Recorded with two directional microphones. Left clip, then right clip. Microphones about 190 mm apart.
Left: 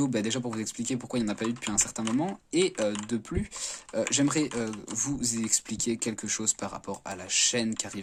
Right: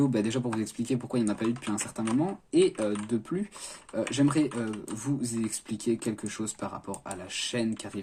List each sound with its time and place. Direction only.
0.0 s speech: 25° left (ahead or behind)